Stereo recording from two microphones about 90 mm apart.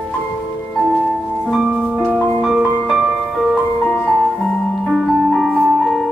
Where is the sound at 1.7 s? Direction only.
10° right (ahead or behind).